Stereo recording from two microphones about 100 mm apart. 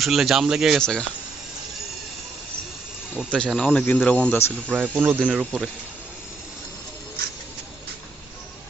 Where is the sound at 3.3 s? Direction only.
10° left (ahead or behind).